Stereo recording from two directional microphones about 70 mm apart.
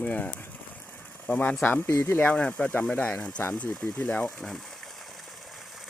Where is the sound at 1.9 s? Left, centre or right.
Left.